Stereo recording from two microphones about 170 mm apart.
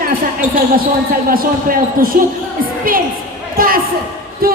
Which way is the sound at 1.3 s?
60° right (ahead or behind).